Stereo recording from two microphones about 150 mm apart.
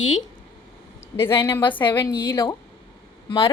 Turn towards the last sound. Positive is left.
turn(degrees=35)  # may be behind; listen again after turning